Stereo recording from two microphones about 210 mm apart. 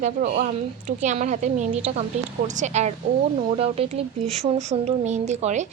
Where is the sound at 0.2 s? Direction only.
35° right (ahead or behind).